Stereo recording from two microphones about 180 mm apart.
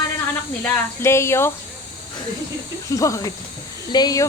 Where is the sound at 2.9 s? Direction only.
20° left (ahead or behind).